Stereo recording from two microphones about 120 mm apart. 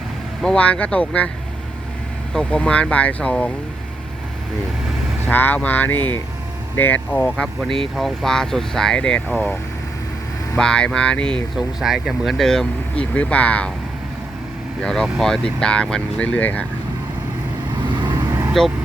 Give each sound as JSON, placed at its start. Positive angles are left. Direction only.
{"t": 0.4, "sound": "speech", "side_deg": 10}
{"t": 2.3, "sound": "speech", "side_deg": 10}
{"t": 5.3, "sound": "speech", "side_deg": 15}
{"t": 10.6, "sound": "speech", "side_deg": 5}
{"t": 11.5, "sound": "speech", "side_deg": -5}
{"t": 14.8, "sound": "speech", "side_deg": 5}
{"t": 17.8, "sound": "vehicle", "side_deg": -40}
{"t": 18.3, "sound": "vehicle", "side_deg": -30}